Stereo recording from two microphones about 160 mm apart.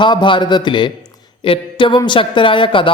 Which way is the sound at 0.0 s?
30° left (ahead or behind).